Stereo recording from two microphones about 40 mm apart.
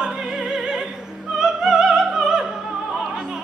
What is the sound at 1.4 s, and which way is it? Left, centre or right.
Opera, centre.